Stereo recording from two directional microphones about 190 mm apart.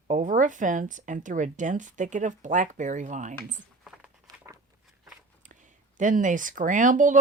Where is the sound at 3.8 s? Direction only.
5° right (ahead or behind).